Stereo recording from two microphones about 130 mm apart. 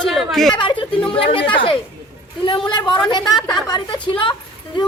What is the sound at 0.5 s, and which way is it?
A woman's voice, 40° left (ahead or behind).